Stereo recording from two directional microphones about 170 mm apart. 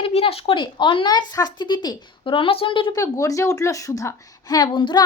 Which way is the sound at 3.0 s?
20° left (ahead or behind).